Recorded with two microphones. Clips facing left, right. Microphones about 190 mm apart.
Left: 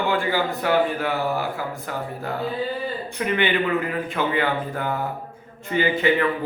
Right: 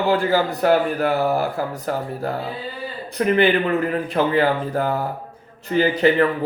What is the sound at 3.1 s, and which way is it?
Speech, 40° right (ahead or behind).